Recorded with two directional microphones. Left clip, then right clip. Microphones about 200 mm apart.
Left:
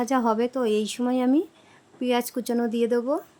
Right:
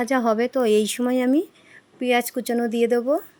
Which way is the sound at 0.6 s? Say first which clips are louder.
Right 5 dB; 20° right (ahead or behind).